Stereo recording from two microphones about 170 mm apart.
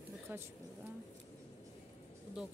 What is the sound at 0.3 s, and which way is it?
Speech, 10° right (ahead or behind).